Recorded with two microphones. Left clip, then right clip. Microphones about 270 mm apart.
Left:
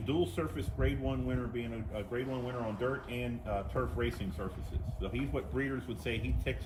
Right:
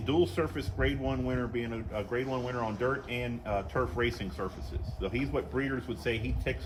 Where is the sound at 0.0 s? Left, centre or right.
Right.